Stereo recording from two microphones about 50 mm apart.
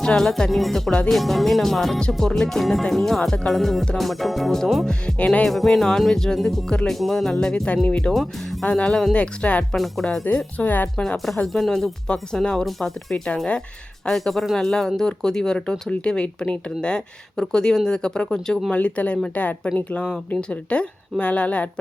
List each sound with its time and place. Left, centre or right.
0.0 s speech: centre
3.2 s speech: centre
5.1 s speech: left
5.5 s speech: centre; by 9.6 s left
9.7 s speech: centre
10.2 s speech: left
11.4 s speech: centre
13.2 s speech: centre
14.2 s speech: centre
18.7 s speech: left